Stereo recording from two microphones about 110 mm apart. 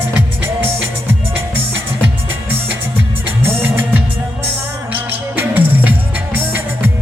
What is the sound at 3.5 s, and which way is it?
Music, 15° right (ahead or behind).